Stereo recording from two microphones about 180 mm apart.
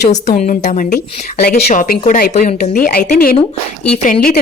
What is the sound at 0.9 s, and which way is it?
Speech, 55° left (ahead or behind).